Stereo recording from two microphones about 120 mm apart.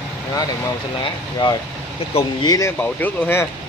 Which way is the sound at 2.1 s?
55° left (ahead or behind).